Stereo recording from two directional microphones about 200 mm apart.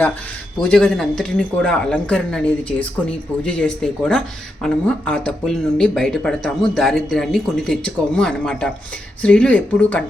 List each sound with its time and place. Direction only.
0.6 s speech: 5° left (ahead or behind)